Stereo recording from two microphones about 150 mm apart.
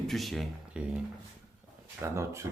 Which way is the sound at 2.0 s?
20° right (ahead or behind).